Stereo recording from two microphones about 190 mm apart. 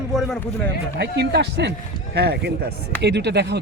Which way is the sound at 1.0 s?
60° right (ahead or behind).